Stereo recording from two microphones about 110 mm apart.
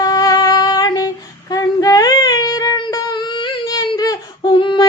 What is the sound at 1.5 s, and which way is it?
Female singing, 30° left (ahead or behind).